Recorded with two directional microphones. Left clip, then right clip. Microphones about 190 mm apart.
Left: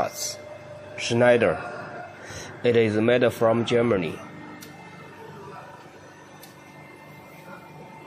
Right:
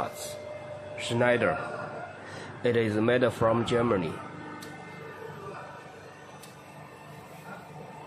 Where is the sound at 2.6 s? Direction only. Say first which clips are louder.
Left 6 dB; 10° left (ahead or behind).